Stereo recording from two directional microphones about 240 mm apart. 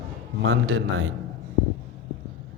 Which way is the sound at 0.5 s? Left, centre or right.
Right.